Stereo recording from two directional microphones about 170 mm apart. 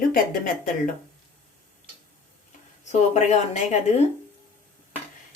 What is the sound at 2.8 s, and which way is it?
Speech, 45° left (ahead or behind).